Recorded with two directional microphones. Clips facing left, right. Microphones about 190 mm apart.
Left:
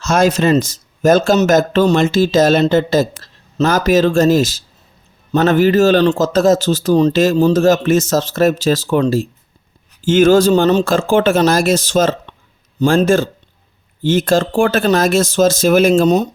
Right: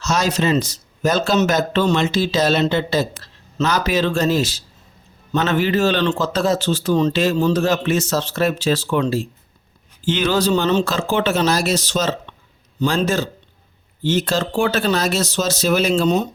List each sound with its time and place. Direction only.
0.0 s a man's voice: 50° left (ahead or behind)